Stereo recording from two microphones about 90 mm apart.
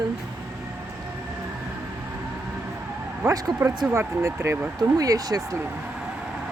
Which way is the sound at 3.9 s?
35° right (ahead or behind).